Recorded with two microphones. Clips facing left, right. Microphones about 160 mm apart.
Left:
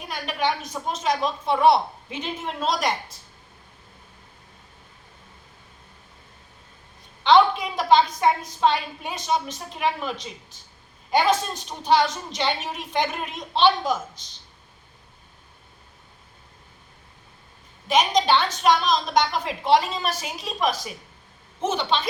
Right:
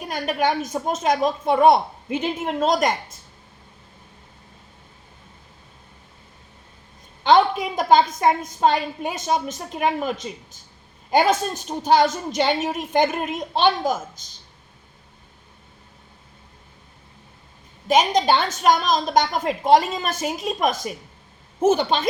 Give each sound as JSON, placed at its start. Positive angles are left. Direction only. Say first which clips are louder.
{"t": 0.1, "sound": "a woman's voice", "louder": "right 4 dB", "side_deg": -45}
{"t": 7.3, "sound": "a woman's voice", "louder": "right 1 dB", "side_deg": -50}
{"t": 17.8, "sound": "a woman's voice", "louder": "right 2 dB", "side_deg": -45}